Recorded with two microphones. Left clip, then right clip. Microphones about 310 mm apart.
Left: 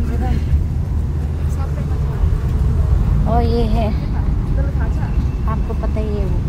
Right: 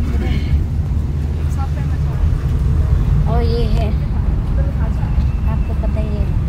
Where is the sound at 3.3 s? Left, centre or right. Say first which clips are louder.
Left 3 dB; centre.